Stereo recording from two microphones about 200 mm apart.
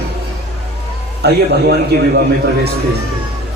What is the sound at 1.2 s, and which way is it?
Speech, 55° right (ahead or behind).